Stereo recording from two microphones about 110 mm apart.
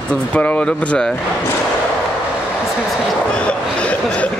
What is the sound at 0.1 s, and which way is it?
Speech, 10° left (ahead or behind).